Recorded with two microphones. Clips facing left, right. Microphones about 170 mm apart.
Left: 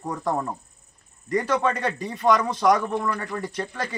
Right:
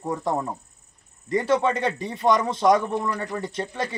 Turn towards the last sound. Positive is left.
turn(degrees=-25)  # may be behind; listen again after turning